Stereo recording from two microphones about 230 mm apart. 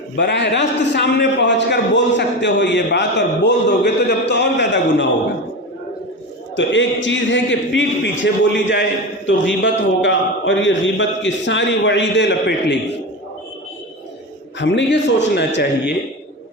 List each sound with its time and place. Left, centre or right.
0.2 s a man's voice: left
6.6 s a man's voice: left
14.6 s a man's voice: left